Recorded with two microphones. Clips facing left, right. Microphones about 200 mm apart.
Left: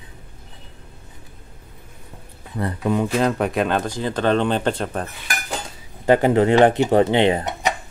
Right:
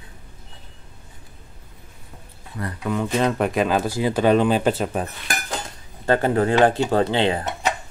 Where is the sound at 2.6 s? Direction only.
25° left (ahead or behind).